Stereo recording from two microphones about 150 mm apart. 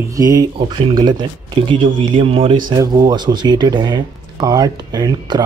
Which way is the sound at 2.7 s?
25° right (ahead or behind).